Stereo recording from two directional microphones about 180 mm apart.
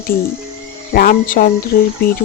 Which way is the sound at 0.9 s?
55° left (ahead or behind).